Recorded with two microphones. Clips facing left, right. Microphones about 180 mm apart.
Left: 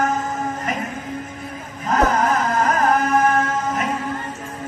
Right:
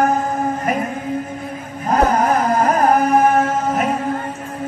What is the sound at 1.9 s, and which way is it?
Music, 50° right (ahead or behind).